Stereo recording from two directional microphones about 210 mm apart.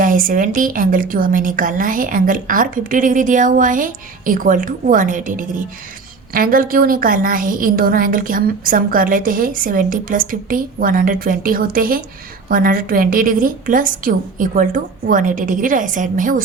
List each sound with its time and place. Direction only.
0.0 s a woman's voice: 40° right (ahead or behind)